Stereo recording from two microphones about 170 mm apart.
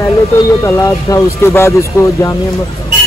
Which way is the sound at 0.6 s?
20° left (ahead or behind).